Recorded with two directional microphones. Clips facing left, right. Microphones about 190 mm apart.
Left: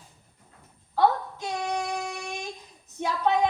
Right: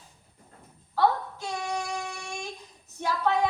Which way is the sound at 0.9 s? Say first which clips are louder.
Left 2 dB; 20° left (ahead or behind).